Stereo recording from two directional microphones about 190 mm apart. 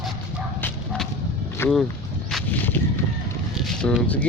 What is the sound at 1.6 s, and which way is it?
Speech, 5° left (ahead or behind).